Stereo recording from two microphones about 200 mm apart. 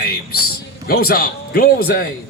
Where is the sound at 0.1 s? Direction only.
50° left (ahead or behind).